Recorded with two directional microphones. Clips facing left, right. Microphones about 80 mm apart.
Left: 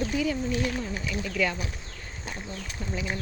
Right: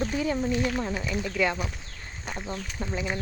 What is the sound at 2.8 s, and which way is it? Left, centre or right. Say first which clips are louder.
Speech: right 2 dB; right.